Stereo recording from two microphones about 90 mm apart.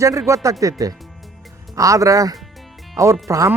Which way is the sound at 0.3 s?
35° right (ahead or behind).